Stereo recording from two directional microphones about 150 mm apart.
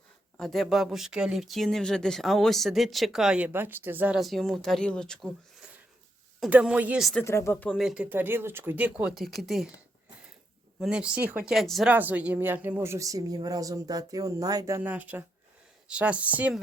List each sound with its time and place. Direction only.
0.3 s speech: centre (ahead or behind)
4.2 s speech: centre (ahead or behind)
7.1 s speech: 15° left (ahead or behind)
7.8 s speech: 5° right (ahead or behind)
10.8 s speech: 5° right (ahead or behind)
11.5 s speech: centre (ahead or behind)
11.9 s speech: 10° right (ahead or behind)